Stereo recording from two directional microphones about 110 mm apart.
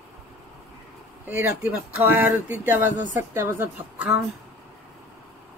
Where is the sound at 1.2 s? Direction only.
15° right (ahead or behind).